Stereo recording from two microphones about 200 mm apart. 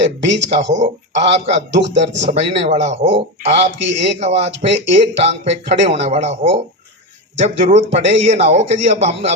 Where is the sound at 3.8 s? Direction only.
65° right (ahead or behind).